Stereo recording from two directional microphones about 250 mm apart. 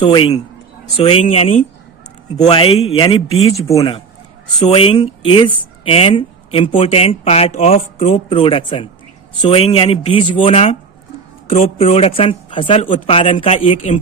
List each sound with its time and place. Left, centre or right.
0.0 s speech: centre